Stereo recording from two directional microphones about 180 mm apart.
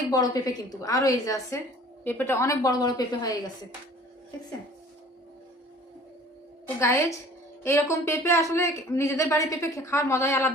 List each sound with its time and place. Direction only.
0.1 s a woman's voice: 20° left (ahead or behind)
6.7 s speech: 15° left (ahead or behind)